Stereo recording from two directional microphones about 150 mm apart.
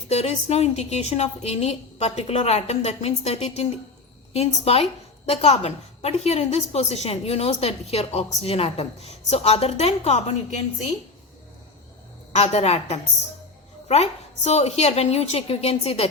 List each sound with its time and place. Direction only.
0.1 s a woman's voice: 45° left (ahead or behind)
12.3 s a woman's voice: 50° left (ahead or behind)